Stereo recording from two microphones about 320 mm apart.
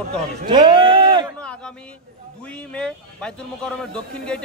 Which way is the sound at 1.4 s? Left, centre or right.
Centre.